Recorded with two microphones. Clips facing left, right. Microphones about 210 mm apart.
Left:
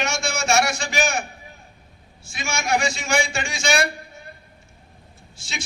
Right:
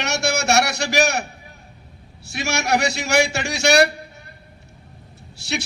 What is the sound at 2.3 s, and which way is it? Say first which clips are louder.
A man's voice: right 3 dB; 70° right (ahead or behind).